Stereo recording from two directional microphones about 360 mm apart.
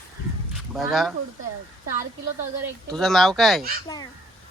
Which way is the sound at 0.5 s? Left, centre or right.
Centre.